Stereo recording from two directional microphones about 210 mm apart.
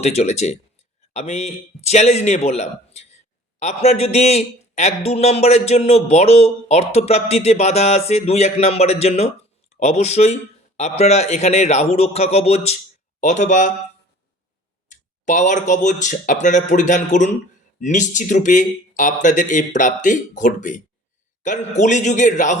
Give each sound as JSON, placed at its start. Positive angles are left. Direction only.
{"t": 0.0, "sound": "a man's voice", "side_deg": 30}
{"t": 14.8, "sound": "a man's voice", "side_deg": 35}